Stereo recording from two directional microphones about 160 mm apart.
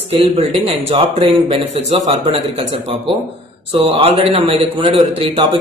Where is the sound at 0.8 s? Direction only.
30° right (ahead or behind).